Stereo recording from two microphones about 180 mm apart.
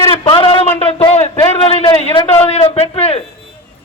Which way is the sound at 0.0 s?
30° left (ahead or behind).